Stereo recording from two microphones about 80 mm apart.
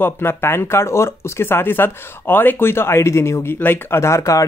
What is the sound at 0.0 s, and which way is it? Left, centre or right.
Speech, left.